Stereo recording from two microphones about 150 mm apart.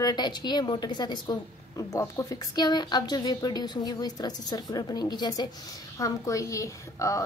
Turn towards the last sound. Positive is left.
turn(degrees=20)  # may be behind; listen again after turning